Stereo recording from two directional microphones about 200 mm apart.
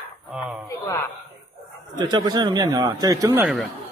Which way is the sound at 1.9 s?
20° right (ahead or behind).